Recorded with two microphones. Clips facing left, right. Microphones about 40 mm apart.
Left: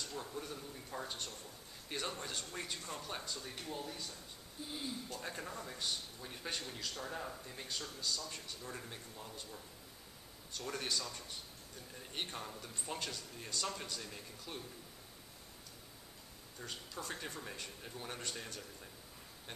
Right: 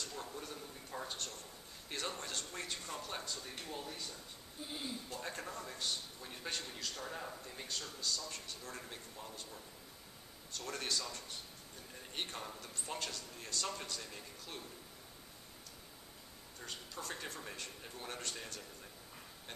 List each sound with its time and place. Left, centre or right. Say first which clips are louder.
0.0 s a sound: left 1 dB; centre
1.9 s speech: even; centre
5.2 s speech: even; centre
10.5 s speech: even; centre
16.5 s speech: left 1 dB; centre